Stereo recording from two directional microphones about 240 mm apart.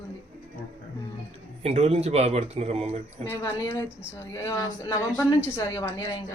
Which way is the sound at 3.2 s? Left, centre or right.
Centre.